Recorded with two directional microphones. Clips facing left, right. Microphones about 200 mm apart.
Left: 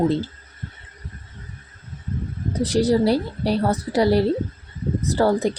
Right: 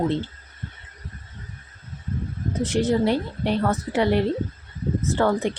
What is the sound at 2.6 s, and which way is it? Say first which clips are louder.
Speech: left 3 dB; 35° left (ahead or behind).